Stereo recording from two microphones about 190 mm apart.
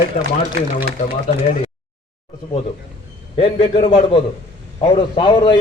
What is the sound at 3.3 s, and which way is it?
A man's voice, 30° left (ahead or behind).